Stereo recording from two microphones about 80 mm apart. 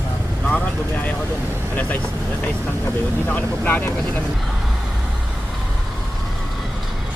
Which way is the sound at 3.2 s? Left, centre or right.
Centre.